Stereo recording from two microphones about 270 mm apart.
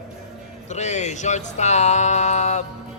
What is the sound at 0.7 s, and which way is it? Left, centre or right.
A man's voice, left.